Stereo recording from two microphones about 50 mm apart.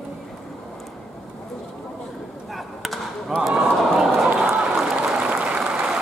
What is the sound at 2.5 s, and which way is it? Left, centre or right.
Basketball bounce, centre.